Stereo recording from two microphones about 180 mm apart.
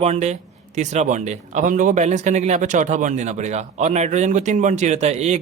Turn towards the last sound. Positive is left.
turn(degrees=-35)  # may be behind; listen again after turning